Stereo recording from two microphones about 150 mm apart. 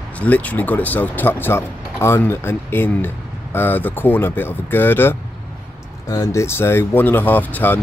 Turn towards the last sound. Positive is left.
turn(degrees=10)  # may be behind; listen again after turning